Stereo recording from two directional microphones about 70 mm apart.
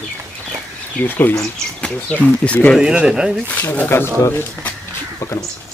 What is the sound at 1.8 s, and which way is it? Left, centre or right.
Speech, centre.